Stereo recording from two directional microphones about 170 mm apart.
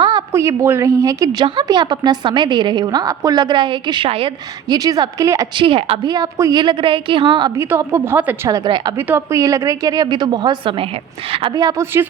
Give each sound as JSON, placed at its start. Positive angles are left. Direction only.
{"t": 0.0, "sound": "a woman's voice", "side_deg": -25}
{"t": 5.6, "sound": "a woman's voice", "side_deg": -30}
{"t": 8.4, "sound": "a woman's voice", "side_deg": -25}
{"t": 9.0, "sound": "a woman's voice", "side_deg": -15}